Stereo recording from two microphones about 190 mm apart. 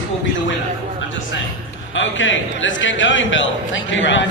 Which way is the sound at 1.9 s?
85° left.